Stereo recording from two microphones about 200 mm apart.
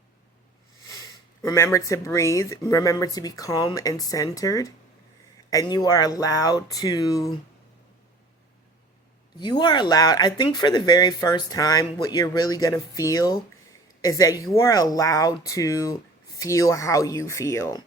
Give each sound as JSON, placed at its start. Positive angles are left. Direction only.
{"t": 0.9, "sound": "speech", "side_deg": 15}
{"t": 9.4, "sound": "speech", "side_deg": 20}